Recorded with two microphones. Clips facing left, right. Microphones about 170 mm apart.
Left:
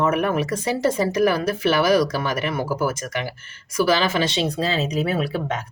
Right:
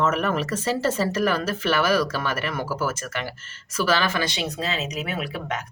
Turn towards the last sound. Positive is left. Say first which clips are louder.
# left 5 dB
turn(degrees=30)  # may be behind; listen again after turning